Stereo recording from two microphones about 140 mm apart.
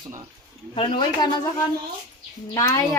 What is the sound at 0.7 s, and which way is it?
Speech, 35° left (ahead or behind).